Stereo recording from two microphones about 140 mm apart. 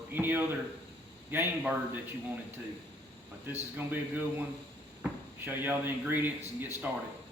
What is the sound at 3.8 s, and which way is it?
Speech, 15° right (ahead or behind).